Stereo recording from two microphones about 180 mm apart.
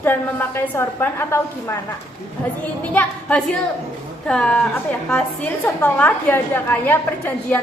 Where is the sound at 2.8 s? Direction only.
10° left (ahead or behind).